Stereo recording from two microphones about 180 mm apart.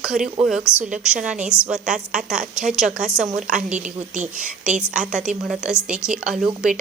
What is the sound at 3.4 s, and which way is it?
Speech, 5° right (ahead or behind).